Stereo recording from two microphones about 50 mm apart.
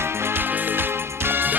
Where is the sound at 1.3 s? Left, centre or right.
Right.